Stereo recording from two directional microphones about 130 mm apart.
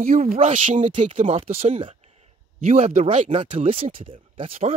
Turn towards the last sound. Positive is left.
turn(degrees=-45)  # may be behind; listen again after turning